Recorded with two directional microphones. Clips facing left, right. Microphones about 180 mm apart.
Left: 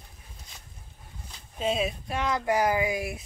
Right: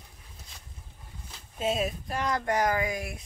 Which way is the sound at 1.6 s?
5° right (ahead or behind).